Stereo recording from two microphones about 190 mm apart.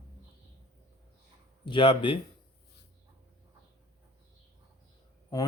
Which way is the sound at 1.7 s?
25° left (ahead or behind).